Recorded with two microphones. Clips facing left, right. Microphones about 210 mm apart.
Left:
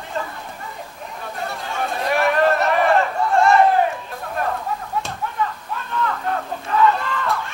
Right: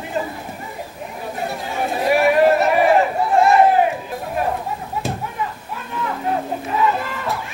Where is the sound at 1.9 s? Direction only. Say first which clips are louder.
Right 5 dB; 5° right (ahead or behind).